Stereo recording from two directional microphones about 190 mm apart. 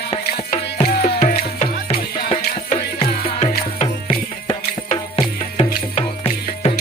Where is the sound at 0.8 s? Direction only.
55° left (ahead or behind).